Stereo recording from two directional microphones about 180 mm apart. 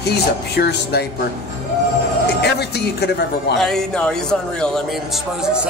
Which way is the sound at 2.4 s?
65° left (ahead or behind).